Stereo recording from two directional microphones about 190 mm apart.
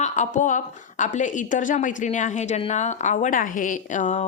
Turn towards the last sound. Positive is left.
turn(degrees=40)  # may be behind; listen again after turning